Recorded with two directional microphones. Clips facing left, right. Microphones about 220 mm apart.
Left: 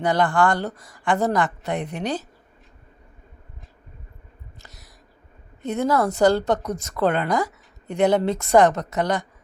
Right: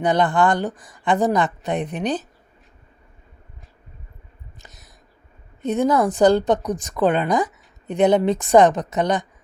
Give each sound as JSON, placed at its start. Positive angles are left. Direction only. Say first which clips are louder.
{"t": 0.0, "sound": "speech", "louder": "right 2 dB", "side_deg": -20}
{"t": 4.5, "sound": "a sound", "louder": "right 2 dB", "side_deg": -20}
{"t": 5.6, "sound": "a woman's voice", "louder": "right 3 dB", "side_deg": -15}